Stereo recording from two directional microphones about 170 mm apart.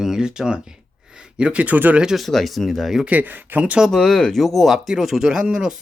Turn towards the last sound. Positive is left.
turn(degrees=-5)  # may be behind; listen again after turning